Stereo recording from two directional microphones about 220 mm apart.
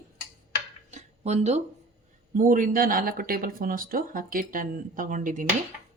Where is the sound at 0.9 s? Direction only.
30° right (ahead or behind).